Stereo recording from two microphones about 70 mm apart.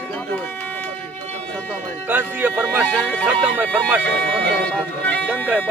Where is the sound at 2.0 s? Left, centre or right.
Right.